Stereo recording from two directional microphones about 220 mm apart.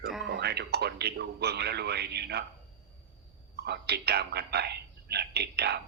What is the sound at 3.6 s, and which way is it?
A man's voice, 50° right (ahead or behind).